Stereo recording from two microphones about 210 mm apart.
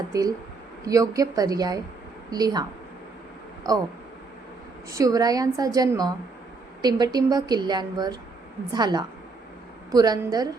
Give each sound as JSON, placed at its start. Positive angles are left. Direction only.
{"t": 0.1, "sound": "a woman's voice", "side_deg": -15}
{"t": 3.6, "sound": "a woman's voice", "side_deg": -20}
{"t": 4.9, "sound": "a woman's voice", "side_deg": -15}